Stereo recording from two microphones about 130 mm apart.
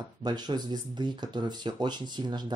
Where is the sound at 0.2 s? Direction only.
35° right (ahead or behind).